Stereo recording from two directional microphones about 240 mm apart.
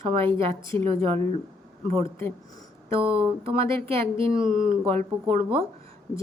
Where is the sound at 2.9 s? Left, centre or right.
Right.